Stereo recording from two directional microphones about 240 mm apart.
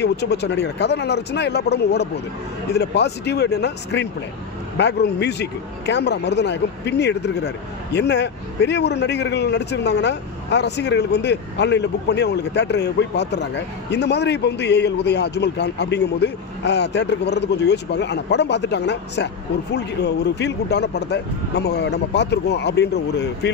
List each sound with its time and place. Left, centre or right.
0.0 s a man's voice: left